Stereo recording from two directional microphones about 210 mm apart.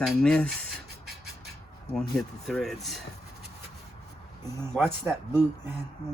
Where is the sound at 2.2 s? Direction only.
Centre (ahead or behind).